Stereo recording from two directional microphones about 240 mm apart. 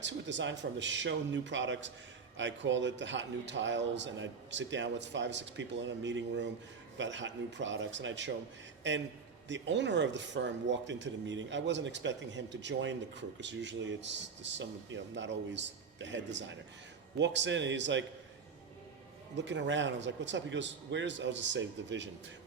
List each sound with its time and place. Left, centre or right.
0.0 s speech: right
19.4 s speech: right